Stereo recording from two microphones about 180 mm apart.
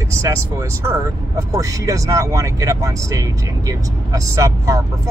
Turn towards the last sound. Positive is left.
turn(degrees=-15)  # may be behind; listen again after turning